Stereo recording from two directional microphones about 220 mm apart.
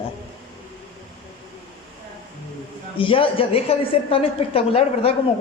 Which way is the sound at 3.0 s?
25° left (ahead or behind).